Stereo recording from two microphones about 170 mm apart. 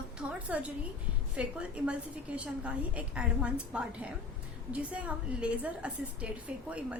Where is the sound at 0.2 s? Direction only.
10° right (ahead or behind).